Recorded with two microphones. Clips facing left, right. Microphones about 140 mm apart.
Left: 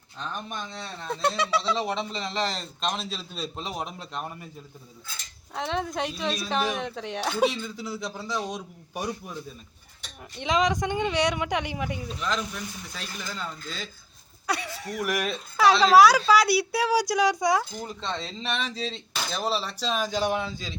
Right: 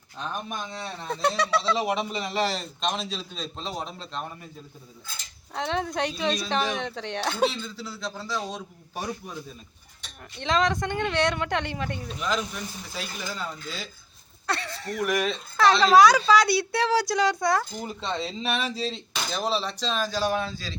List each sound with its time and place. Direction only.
0.2 s speech: 10° right (ahead or behind)
1.4 s speech: 5° left (ahead or behind)
1.7 s speech: 10° right (ahead or behind); by 4.2 s 15° left (ahead or behind)
5.5 s speech: centre (ahead or behind)
10.4 s speech: 15° left (ahead or behind)
12.9 s speech: 5° right (ahead or behind)
14.4 s speech: 10° left (ahead or behind)
17.7 s speech: 5° right (ahead or behind); by 20.7 s 20° left (ahead or behind)